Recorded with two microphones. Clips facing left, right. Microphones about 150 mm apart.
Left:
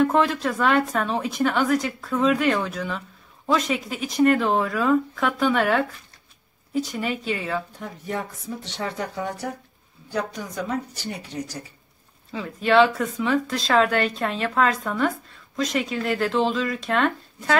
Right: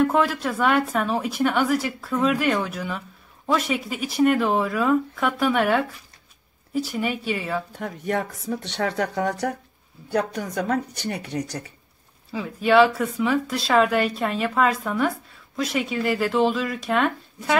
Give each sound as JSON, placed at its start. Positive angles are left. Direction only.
{"t": 0.0, "sound": "speech", "side_deg": -5}
{"t": 7.8, "sound": "speech", "side_deg": -65}
{"t": 10.1, "sound": "speech", "side_deg": -60}
{"t": 12.3, "sound": "speech", "side_deg": -5}